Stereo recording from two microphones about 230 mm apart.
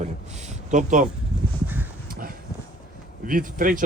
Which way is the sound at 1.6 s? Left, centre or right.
Centre.